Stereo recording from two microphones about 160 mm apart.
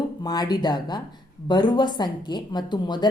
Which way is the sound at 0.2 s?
25° left (ahead or behind).